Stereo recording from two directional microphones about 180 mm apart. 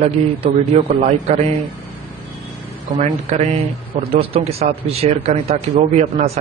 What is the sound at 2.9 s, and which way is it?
A man's voice, 40° right (ahead or behind).